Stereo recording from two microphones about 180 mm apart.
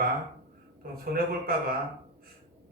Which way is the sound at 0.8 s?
55° right (ahead or behind).